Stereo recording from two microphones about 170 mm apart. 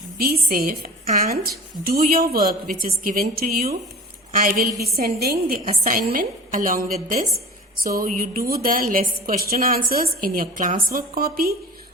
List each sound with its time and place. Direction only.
0.2 s a woman's voice: 60° right (ahead or behind)